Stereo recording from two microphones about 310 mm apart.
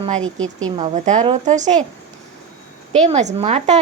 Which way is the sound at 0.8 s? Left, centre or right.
Right.